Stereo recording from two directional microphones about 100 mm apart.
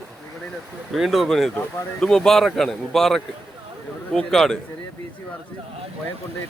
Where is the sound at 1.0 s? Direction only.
Centre (ahead or behind).